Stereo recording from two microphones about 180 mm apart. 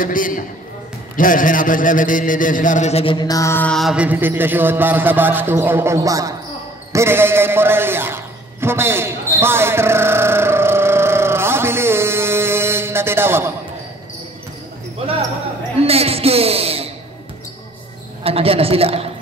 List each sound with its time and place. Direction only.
0.0 s a man's voice: 50° left (ahead or behind); by 6.3 s 20° right (ahead or behind)
6.9 s a sound: 15° right (ahead or behind)
15.9 s speech: 35° right (ahead or behind)
18.2 s a woman's voice: 35° right (ahead or behind)